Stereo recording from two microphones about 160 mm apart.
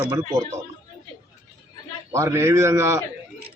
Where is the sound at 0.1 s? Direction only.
20° right (ahead or behind).